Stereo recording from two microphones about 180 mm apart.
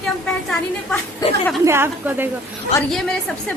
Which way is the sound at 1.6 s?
15° right (ahead or behind).